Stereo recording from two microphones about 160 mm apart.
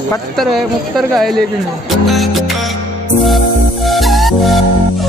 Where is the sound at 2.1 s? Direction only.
Centre (ahead or behind).